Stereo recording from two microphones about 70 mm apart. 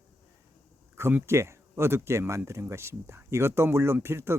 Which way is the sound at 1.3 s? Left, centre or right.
Right.